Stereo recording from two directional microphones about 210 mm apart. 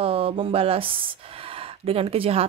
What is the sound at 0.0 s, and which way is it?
A woman's voice, 25° right (ahead or behind).